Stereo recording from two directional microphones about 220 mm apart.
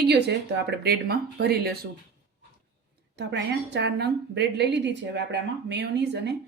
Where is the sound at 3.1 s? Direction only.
50° right (ahead or behind).